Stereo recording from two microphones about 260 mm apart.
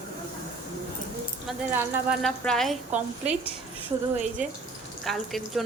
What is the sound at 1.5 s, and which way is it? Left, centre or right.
A woman's voice, centre.